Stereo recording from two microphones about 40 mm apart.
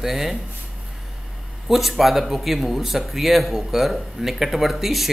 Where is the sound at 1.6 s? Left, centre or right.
Centre.